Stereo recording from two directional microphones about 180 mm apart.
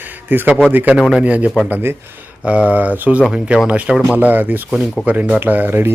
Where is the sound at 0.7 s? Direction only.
10° right (ahead or behind).